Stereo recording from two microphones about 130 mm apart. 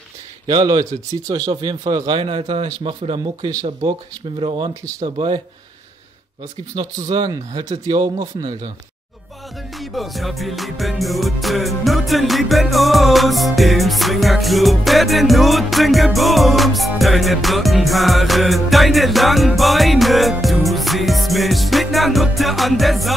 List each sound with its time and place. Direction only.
0.5 s speech: 30° right (ahead or behind)
4.4 s speech: 40° right (ahead or behind)
6.7 s speech: 35° right (ahead or behind)
9.8 s music: centre (ahead or behind)